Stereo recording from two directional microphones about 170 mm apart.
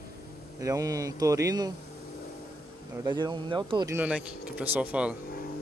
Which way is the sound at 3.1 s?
25° right (ahead or behind).